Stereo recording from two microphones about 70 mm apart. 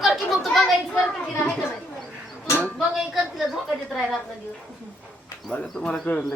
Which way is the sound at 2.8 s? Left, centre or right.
Centre.